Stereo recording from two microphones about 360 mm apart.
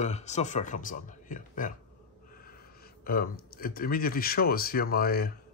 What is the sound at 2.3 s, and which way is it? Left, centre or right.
Gasp, left.